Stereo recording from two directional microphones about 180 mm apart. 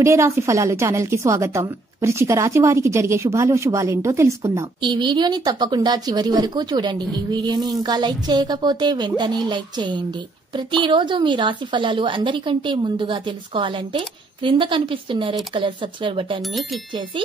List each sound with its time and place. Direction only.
0.0 s a woman's voice: 15° right (ahead or behind)